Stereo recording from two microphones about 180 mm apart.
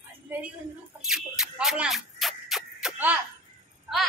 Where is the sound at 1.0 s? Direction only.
5° right (ahead or behind).